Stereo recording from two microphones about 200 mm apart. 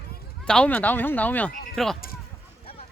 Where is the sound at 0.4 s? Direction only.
5° left (ahead or behind).